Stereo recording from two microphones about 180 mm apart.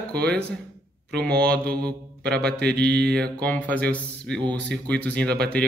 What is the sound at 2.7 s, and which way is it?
Mantra, 65° right (ahead or behind).